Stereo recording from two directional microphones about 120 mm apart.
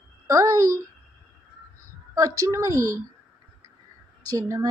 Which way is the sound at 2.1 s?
30° right (ahead or behind).